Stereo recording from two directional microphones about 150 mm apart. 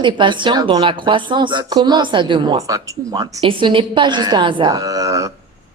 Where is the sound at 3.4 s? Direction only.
35° right (ahead or behind).